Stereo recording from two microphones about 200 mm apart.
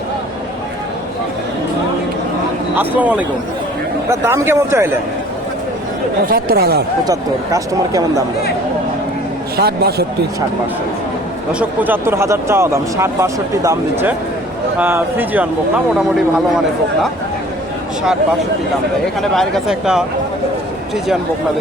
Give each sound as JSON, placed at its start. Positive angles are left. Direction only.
{"t": 2.7, "sound": "speech", "side_deg": -10}
{"t": 6.3, "sound": "a man's voice", "side_deg": -50}
{"t": 7.0, "sound": "speech", "side_deg": -15}
{"t": 9.6, "sound": "a man's voice", "side_deg": -55}
{"t": 11.8, "sound": "speech", "side_deg": -10}
{"t": 19.4, "sound": "speech", "side_deg": 0}